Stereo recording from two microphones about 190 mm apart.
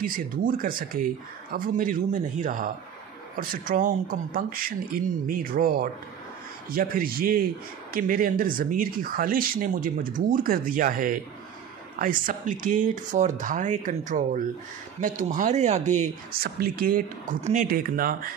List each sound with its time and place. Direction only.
0.0 s speech: 45° right (ahead or behind)
17.6 s speech: 50° right (ahead or behind)